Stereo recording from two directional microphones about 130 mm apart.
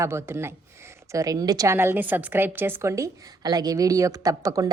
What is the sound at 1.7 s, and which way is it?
A woman's voice, 15° right (ahead or behind).